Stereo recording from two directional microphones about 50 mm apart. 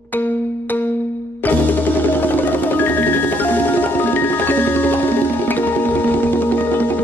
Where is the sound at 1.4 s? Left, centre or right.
Left.